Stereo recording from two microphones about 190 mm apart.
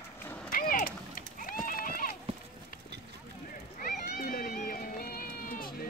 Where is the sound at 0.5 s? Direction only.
50° left (ahead or behind).